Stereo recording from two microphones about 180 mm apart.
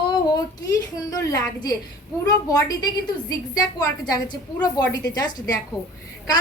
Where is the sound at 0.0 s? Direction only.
20° left (ahead or behind).